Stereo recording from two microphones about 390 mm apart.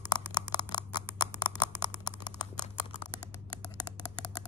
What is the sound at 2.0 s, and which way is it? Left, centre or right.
Typing, centre.